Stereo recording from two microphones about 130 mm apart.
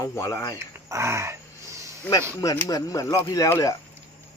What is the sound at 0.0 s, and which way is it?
Speech, 25° left (ahead or behind).